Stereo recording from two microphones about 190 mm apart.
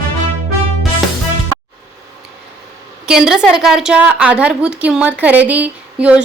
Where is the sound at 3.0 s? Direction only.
5° right (ahead or behind).